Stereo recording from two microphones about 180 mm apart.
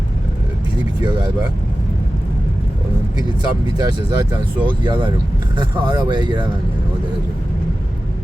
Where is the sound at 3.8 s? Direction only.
25° right (ahead or behind).